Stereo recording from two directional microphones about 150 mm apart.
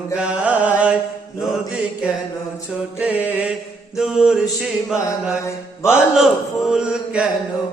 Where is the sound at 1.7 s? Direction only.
5° right (ahead or behind).